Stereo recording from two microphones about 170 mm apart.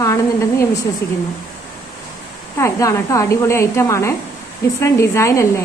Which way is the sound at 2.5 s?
15° left (ahead or behind).